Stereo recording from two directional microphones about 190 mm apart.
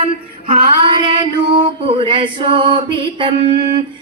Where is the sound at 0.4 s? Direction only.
25° right (ahead or behind).